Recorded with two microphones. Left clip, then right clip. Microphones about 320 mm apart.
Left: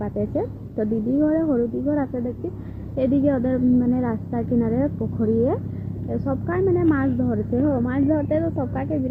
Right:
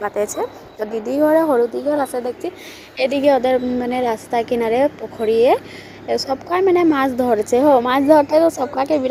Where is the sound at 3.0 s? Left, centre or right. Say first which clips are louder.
Right 6 dB; centre.